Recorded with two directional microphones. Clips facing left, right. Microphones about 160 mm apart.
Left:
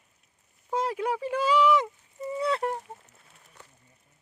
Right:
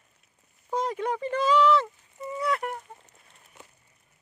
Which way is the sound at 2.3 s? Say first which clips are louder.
Left 1 dB; 30° left (ahead or behind).